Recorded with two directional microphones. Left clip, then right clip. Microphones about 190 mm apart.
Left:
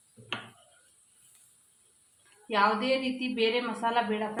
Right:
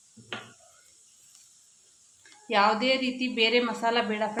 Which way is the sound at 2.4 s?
45° right (ahead or behind).